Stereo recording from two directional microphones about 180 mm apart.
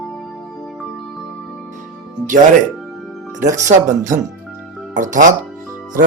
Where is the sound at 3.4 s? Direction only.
45° right (ahead or behind).